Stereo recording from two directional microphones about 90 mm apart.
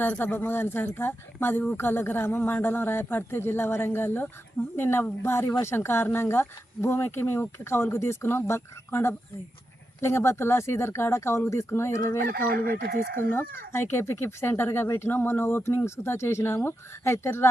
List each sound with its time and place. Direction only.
0.0 s a woman's voice: 20° left (ahead or behind)